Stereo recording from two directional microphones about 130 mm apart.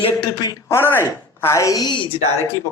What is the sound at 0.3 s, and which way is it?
Speech, 30° left (ahead or behind).